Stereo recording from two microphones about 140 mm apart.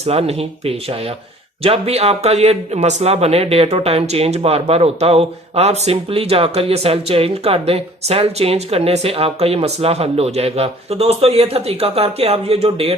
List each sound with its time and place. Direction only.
0.0 s speech: 45° right (ahead or behind)